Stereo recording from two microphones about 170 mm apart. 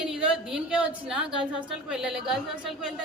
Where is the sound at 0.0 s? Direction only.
5° right (ahead or behind).